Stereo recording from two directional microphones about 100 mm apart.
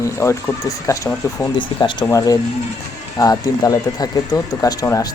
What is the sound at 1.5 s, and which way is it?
Speech, 55° left (ahead or behind).